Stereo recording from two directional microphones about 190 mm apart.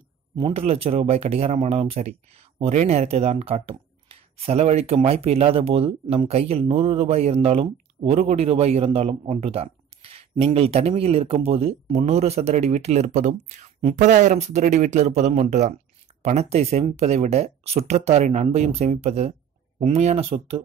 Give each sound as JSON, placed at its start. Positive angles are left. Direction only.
{"t": 0.4, "sound": "speech", "side_deg": -30}